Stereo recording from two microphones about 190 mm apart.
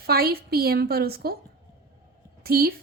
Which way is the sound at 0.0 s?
55° right (ahead or behind).